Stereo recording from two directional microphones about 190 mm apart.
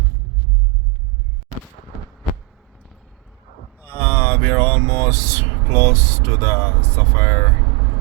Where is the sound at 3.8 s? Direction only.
15° left (ahead or behind).